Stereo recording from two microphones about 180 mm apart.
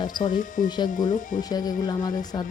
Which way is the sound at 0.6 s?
25° left (ahead or behind).